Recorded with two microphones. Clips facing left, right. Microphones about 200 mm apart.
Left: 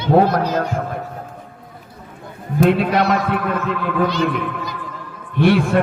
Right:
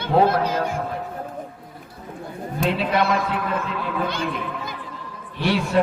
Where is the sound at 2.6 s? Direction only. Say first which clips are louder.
Left 6 dB; 55° left (ahead or behind).